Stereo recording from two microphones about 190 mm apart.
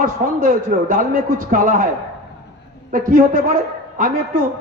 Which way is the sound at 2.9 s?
45° right (ahead or behind).